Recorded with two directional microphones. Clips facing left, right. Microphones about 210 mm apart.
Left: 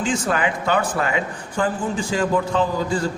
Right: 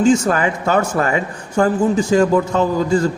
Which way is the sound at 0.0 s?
40° right (ahead or behind).